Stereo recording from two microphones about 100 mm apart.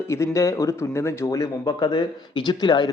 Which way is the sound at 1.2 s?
35° left (ahead or behind).